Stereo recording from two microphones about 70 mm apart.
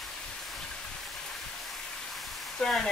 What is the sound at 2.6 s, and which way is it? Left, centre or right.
Speech, centre.